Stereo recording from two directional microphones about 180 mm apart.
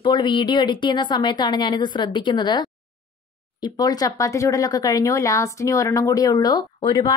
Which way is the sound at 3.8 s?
20° left (ahead or behind).